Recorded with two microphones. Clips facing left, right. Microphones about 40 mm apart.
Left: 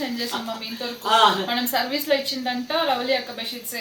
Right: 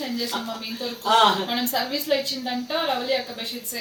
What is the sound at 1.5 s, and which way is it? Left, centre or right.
Speech, left.